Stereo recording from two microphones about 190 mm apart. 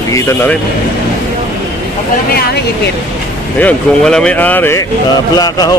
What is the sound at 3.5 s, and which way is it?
Speech, 5° left (ahead or behind).